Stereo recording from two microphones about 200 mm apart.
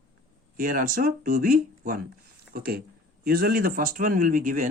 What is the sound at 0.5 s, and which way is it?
Speech, 45° right (ahead or behind).